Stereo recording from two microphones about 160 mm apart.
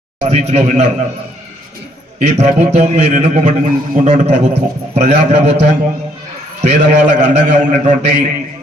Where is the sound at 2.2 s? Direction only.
45° right (ahead or behind).